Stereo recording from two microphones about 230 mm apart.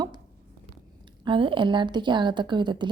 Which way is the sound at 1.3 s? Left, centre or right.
Right.